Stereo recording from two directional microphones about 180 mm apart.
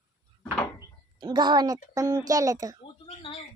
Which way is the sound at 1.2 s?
25° right (ahead or behind).